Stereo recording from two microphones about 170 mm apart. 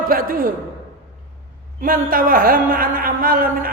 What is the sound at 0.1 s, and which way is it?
Speech, 55° right (ahead or behind).